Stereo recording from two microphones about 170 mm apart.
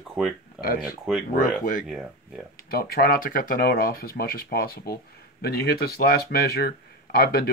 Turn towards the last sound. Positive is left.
turn(degrees=65)  # may be behind; listen again after turning